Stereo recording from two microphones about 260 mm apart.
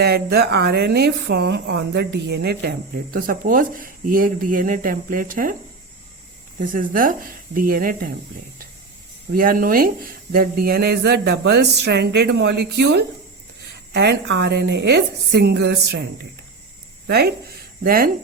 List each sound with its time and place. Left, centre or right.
0.0 s speech: right
6.6 s speech: right
9.3 s speech: right
17.1 s speech: right